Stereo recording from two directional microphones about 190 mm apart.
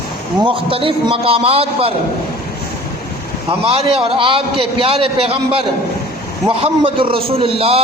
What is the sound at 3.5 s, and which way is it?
A man's voice, 25° right (ahead or behind).